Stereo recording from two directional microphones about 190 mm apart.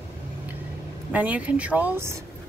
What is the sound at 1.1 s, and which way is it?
Speech, 10° right (ahead or behind).